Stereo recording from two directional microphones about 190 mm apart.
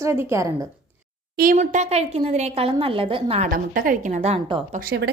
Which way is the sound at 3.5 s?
50° right (ahead or behind).